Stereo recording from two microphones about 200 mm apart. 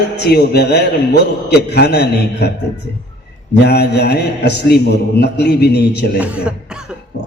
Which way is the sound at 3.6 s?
55° left (ahead or behind).